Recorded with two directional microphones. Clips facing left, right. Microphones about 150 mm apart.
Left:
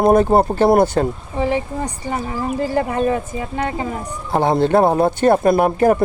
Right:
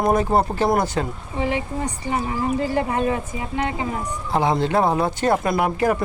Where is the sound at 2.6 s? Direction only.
35° left (ahead or behind).